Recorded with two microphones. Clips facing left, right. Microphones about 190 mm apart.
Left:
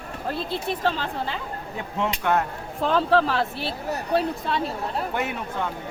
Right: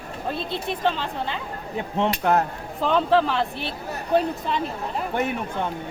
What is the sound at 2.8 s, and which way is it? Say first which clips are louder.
Speech: right 1 dB; centre (ahead or behind).